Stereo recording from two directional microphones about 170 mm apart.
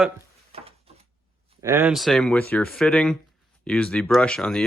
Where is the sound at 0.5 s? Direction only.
35° right (ahead or behind).